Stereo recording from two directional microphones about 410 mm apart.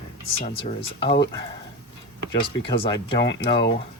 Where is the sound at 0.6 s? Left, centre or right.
Centre.